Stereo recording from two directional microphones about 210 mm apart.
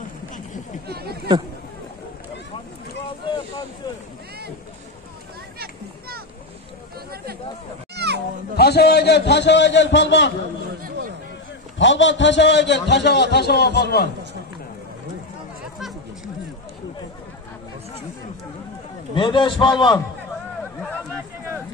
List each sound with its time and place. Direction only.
0.8 s speech: 50° right (ahead or behind)
5.6 s children playing: 45° right (ahead or behind)
7.9 s a sound: 55° right (ahead or behind)
8.5 s a man's voice: 50° left (ahead or behind)
11.8 s a man's voice: 60° left (ahead or behind)
19.1 s a man's voice: 25° left (ahead or behind)